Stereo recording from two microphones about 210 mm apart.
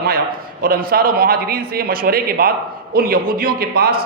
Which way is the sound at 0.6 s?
45° right (ahead or behind).